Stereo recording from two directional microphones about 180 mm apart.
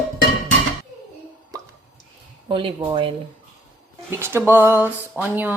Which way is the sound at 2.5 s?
30° right (ahead or behind).